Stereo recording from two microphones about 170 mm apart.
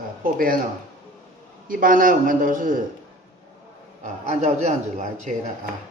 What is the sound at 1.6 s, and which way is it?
A man's voice, 55° right (ahead or behind).